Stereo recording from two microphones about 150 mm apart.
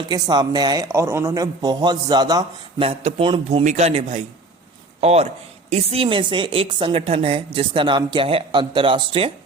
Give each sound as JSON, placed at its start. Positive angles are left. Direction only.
{"t": 0.1, "sound": "speech", "side_deg": -25}
{"t": 2.8, "sound": "a man's voice", "side_deg": -45}
{"t": 3.6, "sound": "a man's voice", "side_deg": -50}